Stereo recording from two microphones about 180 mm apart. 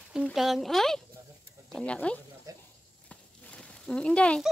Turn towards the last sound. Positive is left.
turn(degrees=5)  # may be behind; listen again after turning